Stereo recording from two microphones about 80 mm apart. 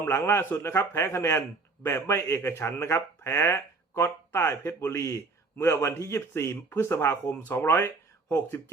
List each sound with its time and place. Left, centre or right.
0.0 s a man's voice: left